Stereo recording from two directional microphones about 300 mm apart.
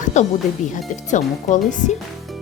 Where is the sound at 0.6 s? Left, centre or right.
Left.